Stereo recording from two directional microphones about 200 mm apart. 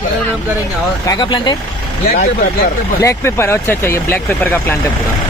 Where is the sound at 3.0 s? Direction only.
15° left (ahead or behind).